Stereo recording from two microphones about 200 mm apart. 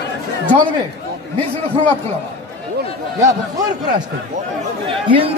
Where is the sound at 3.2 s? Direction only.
20° right (ahead or behind).